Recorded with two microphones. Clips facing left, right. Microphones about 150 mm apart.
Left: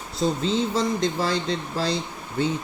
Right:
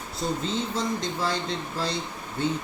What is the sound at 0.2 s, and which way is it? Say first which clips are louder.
Speech: left 5 dB; 90° left.